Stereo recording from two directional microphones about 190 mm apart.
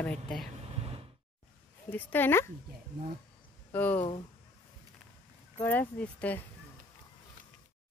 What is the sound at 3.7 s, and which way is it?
Speech, 10° left (ahead or behind).